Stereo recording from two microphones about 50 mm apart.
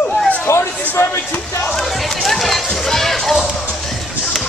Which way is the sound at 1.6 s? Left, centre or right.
Centre.